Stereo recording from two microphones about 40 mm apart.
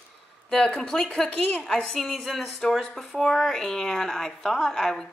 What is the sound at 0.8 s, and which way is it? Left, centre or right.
Speech, centre.